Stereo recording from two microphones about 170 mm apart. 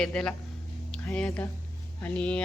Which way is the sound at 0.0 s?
5° left (ahead or behind).